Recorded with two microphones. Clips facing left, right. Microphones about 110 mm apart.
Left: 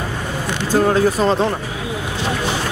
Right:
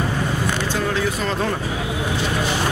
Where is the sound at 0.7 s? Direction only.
40° left (ahead or behind).